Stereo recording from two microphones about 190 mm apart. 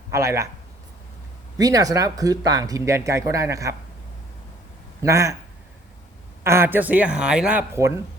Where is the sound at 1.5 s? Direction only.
20° right (ahead or behind).